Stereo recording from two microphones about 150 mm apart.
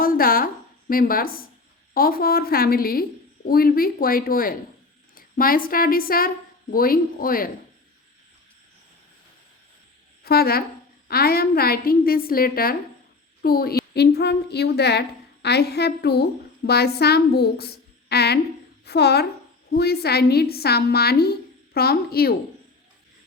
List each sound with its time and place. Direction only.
0.0 s a sound: 75° left (ahead or behind)
1.9 s a woman's voice: 75° left (ahead or behind)
10.2 s a woman's voice: 90° left
13.4 s a woman's voice: 90° left